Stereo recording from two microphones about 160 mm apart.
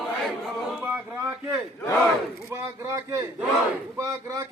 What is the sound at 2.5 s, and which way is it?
A man's voice, 20° right (ahead or behind).